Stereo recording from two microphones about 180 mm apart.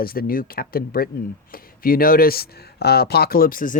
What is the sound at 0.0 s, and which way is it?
Speech, 55° left (ahead or behind).